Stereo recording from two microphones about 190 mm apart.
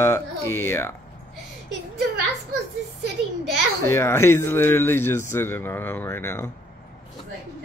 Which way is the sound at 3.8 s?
15° left (ahead or behind).